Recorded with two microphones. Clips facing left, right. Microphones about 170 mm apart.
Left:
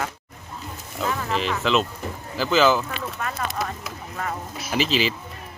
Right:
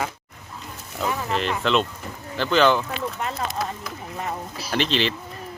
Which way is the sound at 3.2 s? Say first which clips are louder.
Right 1 dB; 25° right (ahead or behind).